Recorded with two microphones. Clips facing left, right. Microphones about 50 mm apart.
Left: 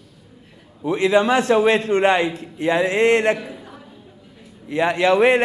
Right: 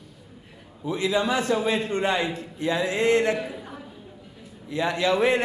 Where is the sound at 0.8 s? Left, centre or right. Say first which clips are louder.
Left 7 dB; left.